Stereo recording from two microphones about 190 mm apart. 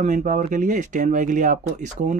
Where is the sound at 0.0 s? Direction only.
40° right (ahead or behind).